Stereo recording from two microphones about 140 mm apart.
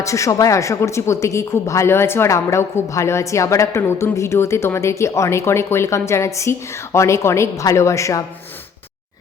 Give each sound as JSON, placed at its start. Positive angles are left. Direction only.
{"t": 0.0, "sound": "speech", "side_deg": 20}